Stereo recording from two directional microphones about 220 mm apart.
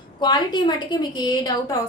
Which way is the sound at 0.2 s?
20° left (ahead or behind).